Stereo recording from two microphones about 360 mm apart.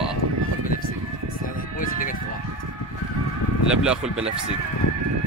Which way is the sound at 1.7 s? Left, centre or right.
Left.